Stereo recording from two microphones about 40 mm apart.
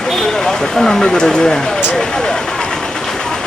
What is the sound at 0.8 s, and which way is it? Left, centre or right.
Speech, centre.